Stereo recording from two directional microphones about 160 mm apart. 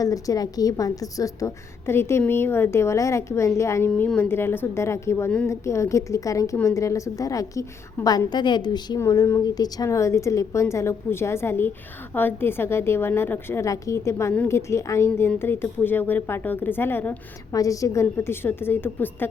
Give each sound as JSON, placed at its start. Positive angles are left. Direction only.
{"t": 0.0, "sound": "a woman's voice", "side_deg": 20}